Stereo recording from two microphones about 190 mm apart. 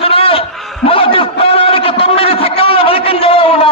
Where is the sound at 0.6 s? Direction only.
Centre (ahead or behind).